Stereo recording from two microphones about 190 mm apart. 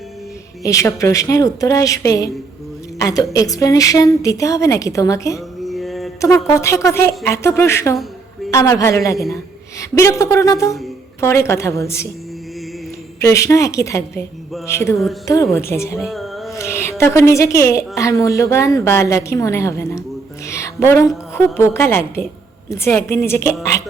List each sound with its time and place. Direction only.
0.6 s a woman's voice: 15° left (ahead or behind)
5.6 s a sound: centre (ahead or behind)
6.5 s a woman's voice: 15° left (ahead or behind)
13.1 s a woman's voice: 15° left (ahead or behind)
16.0 s a sound: centre (ahead or behind)
16.5 s music: 15° left (ahead or behind)
17.0 s a woman's voice: 15° left (ahead or behind)
20.5 s music: 15° left (ahead or behind)
21.3 s a woman's voice: 15° left (ahead or behind)